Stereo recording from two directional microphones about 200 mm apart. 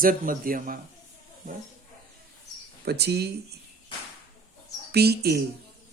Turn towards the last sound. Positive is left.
turn(degrees=-55)  # may be behind; listen again after turning